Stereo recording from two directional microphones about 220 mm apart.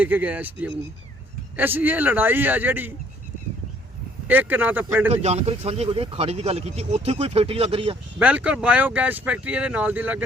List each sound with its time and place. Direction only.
0.0 s speech: 5° right (ahead or behind)
4.3 s speech: 10° right (ahead or behind)
5.1 s speech: 30° right (ahead or behind)
8.2 s speech: 5° right (ahead or behind)